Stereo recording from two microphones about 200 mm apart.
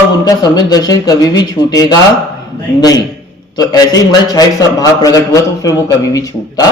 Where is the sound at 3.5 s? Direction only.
20° left (ahead or behind).